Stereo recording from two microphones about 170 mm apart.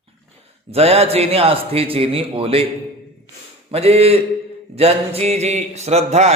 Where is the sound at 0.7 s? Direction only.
40° right (ahead or behind).